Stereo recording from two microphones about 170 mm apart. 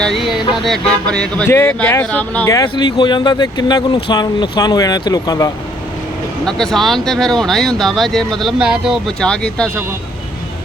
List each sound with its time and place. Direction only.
0.0 s music: centre (ahead or behind); by 5.5 s 20° left (ahead or behind)
6.4 s speech: 5° left (ahead or behind)